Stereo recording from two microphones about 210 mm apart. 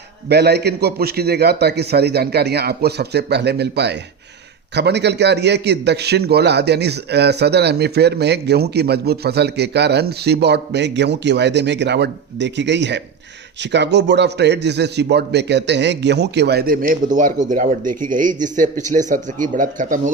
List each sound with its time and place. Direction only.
0.3 s a man's voice: 50° right (ahead or behind)